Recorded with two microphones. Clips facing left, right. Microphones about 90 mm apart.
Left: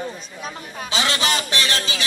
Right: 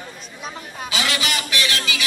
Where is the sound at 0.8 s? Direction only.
30° left (ahead or behind).